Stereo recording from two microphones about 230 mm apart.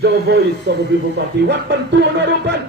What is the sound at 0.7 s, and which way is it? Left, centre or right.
Speech, right.